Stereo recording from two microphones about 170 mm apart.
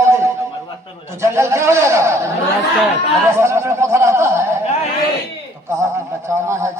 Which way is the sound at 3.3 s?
15° right (ahead or behind).